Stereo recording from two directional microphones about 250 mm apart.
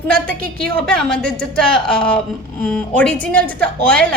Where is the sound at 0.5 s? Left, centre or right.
Centre.